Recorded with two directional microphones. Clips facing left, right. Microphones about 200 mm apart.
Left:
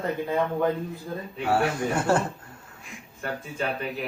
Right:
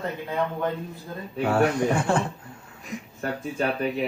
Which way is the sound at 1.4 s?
45° right (ahead or behind).